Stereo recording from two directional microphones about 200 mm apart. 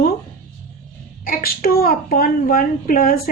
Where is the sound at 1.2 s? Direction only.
45° left (ahead or behind).